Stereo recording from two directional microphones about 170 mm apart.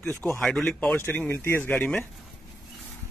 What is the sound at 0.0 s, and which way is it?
Speech, 10° left (ahead or behind).